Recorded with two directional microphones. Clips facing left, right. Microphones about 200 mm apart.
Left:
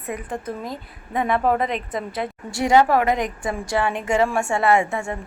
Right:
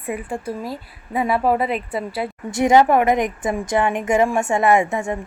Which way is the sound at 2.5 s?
20° right (ahead or behind).